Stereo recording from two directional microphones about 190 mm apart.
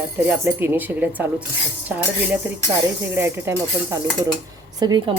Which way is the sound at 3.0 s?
10° right (ahead or behind).